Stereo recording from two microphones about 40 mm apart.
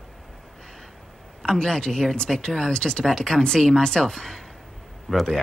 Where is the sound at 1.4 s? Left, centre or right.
Centre.